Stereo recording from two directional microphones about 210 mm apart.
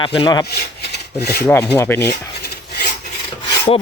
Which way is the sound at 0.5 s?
50° left (ahead or behind).